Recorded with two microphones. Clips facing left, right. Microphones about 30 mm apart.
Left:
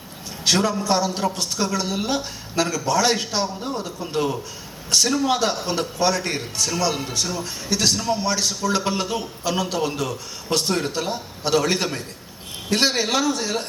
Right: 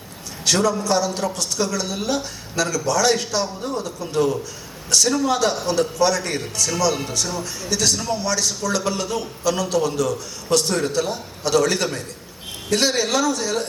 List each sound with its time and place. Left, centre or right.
0.4 s a woman's voice: left